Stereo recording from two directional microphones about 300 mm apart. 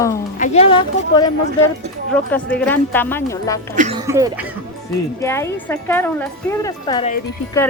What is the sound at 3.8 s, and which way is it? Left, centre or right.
Speech, right.